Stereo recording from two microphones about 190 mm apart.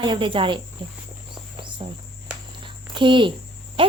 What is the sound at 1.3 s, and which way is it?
Cricket, 25° right (ahead or behind).